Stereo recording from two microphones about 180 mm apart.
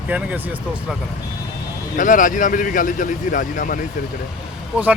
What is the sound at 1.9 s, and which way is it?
Speech, 45° left (ahead or behind).